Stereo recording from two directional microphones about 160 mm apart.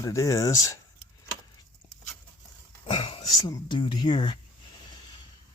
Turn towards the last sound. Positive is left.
turn(degrees=30)  # may be behind; listen again after turning